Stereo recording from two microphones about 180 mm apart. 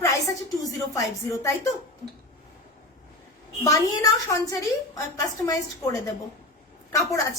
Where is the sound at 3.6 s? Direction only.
20° left (ahead or behind).